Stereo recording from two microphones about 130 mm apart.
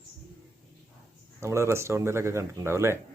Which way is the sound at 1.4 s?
20° right (ahead or behind).